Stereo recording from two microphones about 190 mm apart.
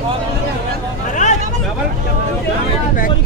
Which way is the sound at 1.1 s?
40° left (ahead or behind).